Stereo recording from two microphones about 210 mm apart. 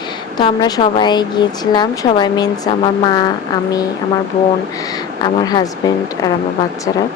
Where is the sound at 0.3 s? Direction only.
20° left (ahead or behind).